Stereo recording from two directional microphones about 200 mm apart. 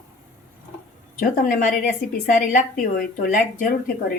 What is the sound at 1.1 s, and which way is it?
Speech, 45° left (ahead or behind).